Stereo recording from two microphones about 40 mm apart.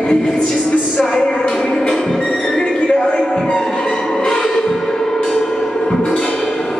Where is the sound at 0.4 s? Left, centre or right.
Centre.